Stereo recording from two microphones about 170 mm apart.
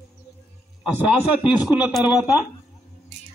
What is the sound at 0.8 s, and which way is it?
A man's voice, 5° right (ahead or behind).